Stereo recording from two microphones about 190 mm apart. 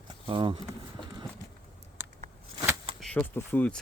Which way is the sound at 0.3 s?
25° right (ahead or behind).